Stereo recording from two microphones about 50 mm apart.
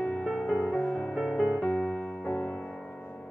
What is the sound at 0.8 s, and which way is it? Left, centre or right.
Music, centre.